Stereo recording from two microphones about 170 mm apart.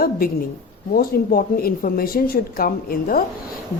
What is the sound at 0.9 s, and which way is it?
A woman's voice, 60° left (ahead or behind).